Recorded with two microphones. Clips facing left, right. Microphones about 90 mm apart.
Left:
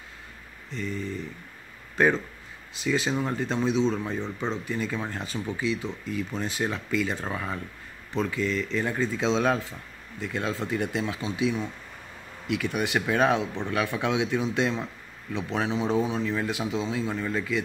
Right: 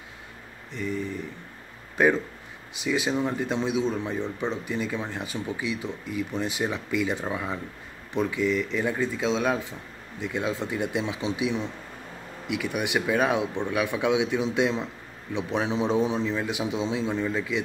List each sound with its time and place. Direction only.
0.7 s speech: 15° right (ahead or behind)
4.2 s speech: 20° left (ahead or behind)
4.6 s speech: 10° right (ahead or behind)
10.2 s a man's voice: 15° right (ahead or behind)